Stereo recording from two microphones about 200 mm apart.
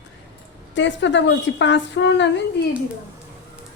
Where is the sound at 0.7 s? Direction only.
65° left (ahead or behind).